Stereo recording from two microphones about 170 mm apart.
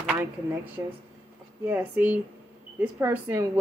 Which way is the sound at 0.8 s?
15° right (ahead or behind).